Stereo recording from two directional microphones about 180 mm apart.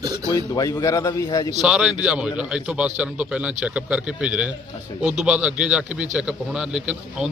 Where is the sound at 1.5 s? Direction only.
5° right (ahead or behind).